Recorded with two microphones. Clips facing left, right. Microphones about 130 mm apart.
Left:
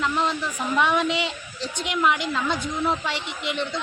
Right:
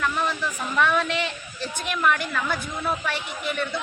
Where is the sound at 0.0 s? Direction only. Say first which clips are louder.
Left 1 dB; 20° left (ahead or behind).